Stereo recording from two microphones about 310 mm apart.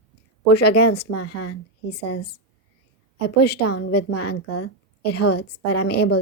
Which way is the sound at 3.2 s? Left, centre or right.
Left.